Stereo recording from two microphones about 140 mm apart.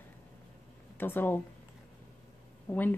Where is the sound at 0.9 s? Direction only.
15° left (ahead or behind).